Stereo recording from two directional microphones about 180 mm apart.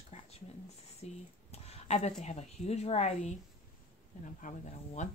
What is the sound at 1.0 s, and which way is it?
Speech, 35° left (ahead or behind).